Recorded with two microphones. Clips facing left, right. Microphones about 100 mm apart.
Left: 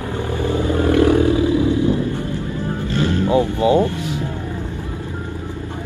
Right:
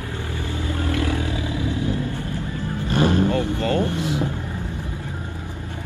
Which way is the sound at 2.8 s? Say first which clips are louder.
Right 2 dB; 20° right (ahead or behind).